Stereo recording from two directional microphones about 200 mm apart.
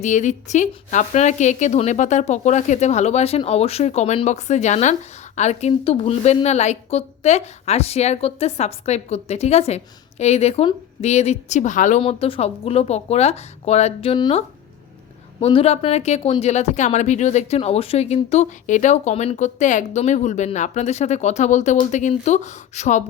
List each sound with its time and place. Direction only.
0.0 s a woman's voice: 35° left (ahead or behind)